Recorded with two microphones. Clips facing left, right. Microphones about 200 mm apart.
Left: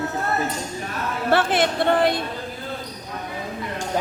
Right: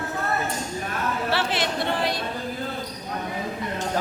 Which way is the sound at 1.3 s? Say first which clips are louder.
Left 9 dB; 50° left (ahead or behind).